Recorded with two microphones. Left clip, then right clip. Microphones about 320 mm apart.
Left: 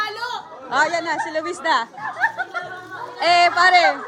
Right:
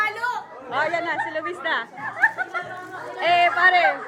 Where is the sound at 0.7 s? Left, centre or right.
Left.